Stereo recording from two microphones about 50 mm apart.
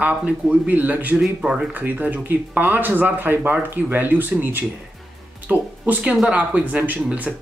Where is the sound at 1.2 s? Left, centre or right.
Centre.